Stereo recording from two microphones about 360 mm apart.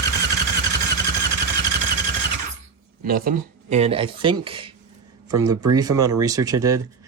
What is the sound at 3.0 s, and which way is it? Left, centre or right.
Speech, right.